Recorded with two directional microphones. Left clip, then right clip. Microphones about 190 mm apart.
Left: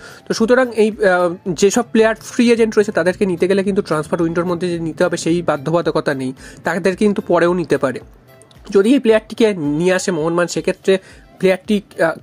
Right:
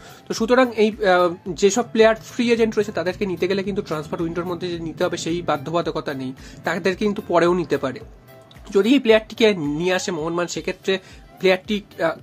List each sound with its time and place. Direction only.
0.3 s speech: 25° left (ahead or behind)